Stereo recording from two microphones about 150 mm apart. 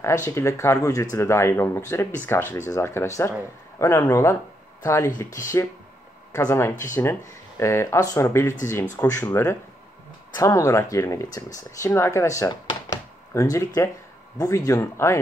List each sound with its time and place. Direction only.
0.0 s speech: 20° left (ahead or behind)